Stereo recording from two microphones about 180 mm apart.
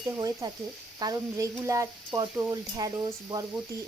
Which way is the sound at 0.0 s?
15° right (ahead or behind).